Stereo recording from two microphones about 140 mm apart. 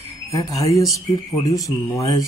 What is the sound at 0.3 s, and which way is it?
Speech, 25° left (ahead or behind).